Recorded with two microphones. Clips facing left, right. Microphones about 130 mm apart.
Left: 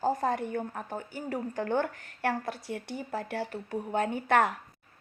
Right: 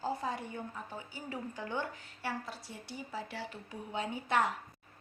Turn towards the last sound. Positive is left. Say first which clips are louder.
# left 6 dB
turn(degrees=55)  # may be behind; listen again after turning